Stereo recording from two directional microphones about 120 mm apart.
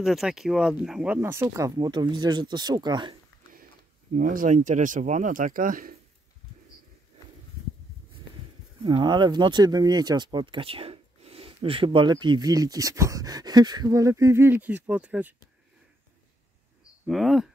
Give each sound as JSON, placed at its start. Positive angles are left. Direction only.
{"t": 0.0, "sound": "speech", "side_deg": -5}
{"t": 1.1, "sound": "speech", "side_deg": -20}
{"t": 1.8, "sound": "speech", "side_deg": -35}
{"t": 4.1, "sound": "speech", "side_deg": -90}
{"t": 8.8, "sound": "speech", "side_deg": -40}
{"t": 17.1, "sound": "speech", "side_deg": 0}